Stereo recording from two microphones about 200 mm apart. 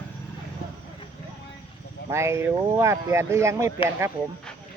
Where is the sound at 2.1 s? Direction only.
15° right (ahead or behind).